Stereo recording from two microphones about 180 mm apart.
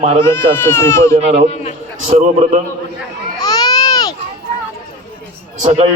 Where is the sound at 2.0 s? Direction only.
40° right (ahead or behind).